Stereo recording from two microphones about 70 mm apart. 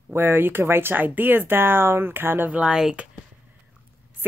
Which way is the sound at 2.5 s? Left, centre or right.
Centre.